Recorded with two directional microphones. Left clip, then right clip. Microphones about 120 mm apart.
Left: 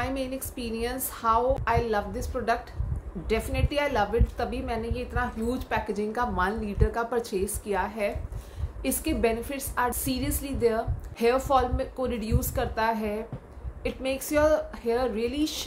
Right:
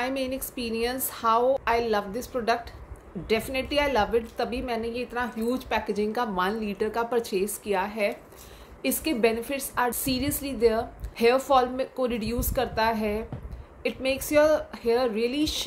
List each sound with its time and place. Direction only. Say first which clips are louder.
0.0 s a woman's voice: right 2 dB; 35° right (ahead or behind)